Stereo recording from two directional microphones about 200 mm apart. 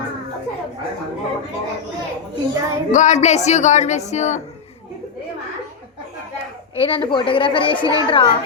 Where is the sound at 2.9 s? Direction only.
40° left (ahead or behind).